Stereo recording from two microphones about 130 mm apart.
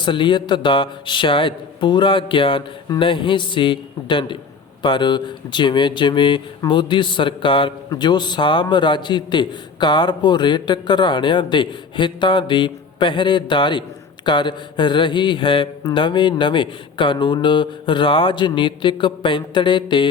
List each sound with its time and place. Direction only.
0.0 s a man's voice: 40° left (ahead or behind)